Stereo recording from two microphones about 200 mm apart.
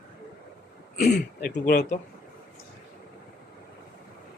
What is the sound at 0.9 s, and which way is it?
Speech, 50° left (ahead or behind).